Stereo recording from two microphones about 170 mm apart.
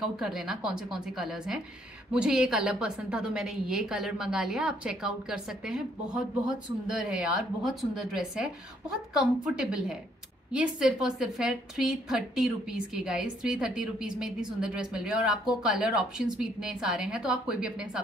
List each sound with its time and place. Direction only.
0.0 s a woman's voice: 5° right (ahead or behind)